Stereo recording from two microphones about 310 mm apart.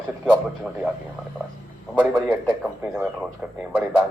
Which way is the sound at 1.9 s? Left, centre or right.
Centre.